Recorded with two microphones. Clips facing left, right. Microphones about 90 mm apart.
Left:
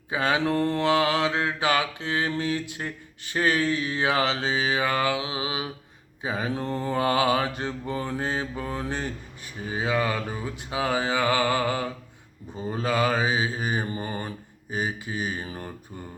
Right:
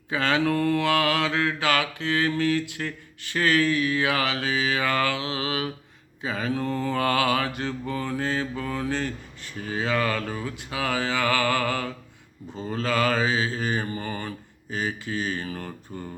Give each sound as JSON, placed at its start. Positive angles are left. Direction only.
{"t": 0.1, "sound": "mantra", "side_deg": 20}